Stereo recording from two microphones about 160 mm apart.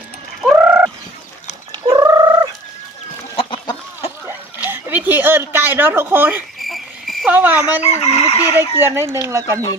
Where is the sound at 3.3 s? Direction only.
35° left (ahead or behind).